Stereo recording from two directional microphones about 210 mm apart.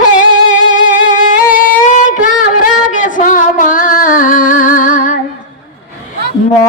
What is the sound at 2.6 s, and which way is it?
Music, 40° left (ahead or behind).